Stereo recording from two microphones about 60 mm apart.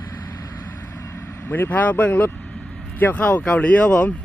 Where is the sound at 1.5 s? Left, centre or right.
Left.